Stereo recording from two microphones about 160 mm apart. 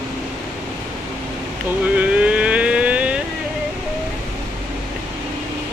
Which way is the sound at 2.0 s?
10° right (ahead or behind).